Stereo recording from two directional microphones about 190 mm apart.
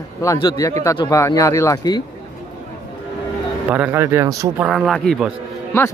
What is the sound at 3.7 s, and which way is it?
Speech, 10° right (ahead or behind).